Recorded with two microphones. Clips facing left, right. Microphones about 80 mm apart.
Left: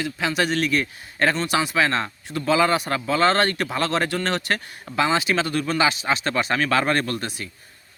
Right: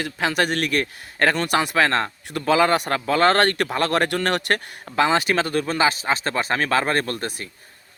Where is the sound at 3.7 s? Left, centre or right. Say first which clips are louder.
Right 2 dB; right.